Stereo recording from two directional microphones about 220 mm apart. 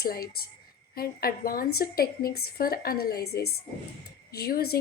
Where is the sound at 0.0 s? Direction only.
45° left (ahead or behind).